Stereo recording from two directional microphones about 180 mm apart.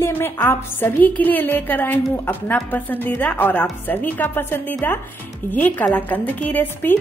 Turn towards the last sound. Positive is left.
turn(degrees=10)  # may be behind; listen again after turning